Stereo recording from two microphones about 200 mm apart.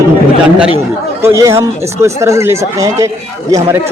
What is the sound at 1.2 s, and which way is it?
Speech, 15° right (ahead or behind).